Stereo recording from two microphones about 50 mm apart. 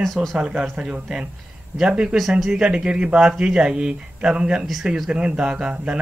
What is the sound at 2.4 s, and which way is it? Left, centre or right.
Speech, centre.